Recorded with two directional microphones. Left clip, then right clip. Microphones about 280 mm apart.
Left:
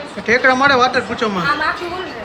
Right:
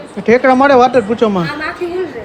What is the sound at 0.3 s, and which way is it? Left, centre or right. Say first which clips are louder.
Speech: right 4 dB; centre.